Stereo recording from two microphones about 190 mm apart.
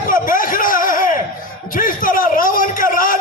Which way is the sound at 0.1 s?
45° left (ahead or behind).